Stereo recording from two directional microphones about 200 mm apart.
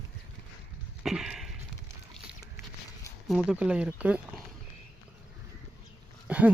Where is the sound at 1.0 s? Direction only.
5° right (ahead or behind).